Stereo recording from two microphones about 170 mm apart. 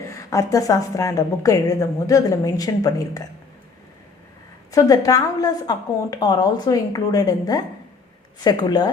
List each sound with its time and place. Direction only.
0.1 s a woman's voice: 20° left (ahead or behind)
4.7 s a woman's voice: 20° left (ahead or behind)